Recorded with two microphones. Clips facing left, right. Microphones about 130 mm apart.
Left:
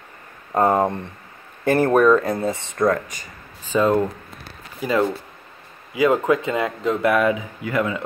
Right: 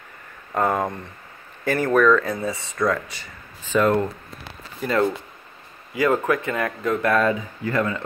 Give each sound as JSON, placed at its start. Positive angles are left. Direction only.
{"t": 0.6, "sound": "speech", "side_deg": 30}
{"t": 1.6, "sound": "speech", "side_deg": 45}
{"t": 2.4, "sound": "speech", "side_deg": 35}
{"t": 3.1, "sound": "a sound", "side_deg": 45}
{"t": 3.7, "sound": "speech", "side_deg": 10}
{"t": 5.9, "sound": "speech", "side_deg": 20}